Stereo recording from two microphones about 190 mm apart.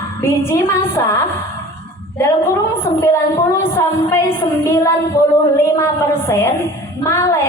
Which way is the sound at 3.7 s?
15° left (ahead or behind).